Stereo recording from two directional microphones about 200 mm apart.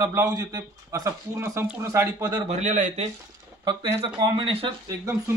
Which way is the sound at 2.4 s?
35° right (ahead or behind).